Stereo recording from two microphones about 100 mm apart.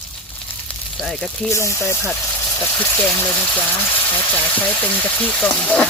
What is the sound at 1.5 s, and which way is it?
Speech, 30° left (ahead or behind).